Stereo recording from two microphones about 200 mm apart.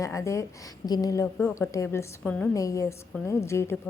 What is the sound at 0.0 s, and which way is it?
A woman's voice, 15° left (ahead or behind).